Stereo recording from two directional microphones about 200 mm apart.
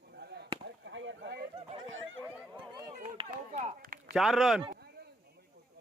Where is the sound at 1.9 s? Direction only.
70° right (ahead or behind).